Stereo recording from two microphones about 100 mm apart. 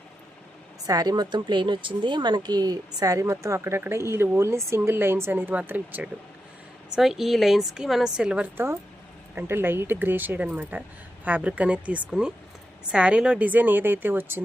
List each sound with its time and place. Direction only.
0.9 s a woman's voice: 40° right (ahead or behind); by 6.1 s 15° right (ahead or behind)
6.9 s a woman's voice: 5° right (ahead or behind)
8.5 s a woman's voice: 25° right (ahead or behind)